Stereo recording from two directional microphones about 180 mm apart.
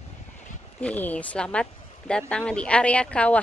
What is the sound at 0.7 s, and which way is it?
Speech, 10° left (ahead or behind).